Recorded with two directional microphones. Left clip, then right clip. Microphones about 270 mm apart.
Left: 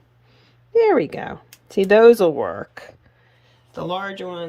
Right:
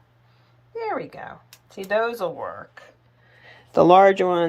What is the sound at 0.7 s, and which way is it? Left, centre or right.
Speech, left.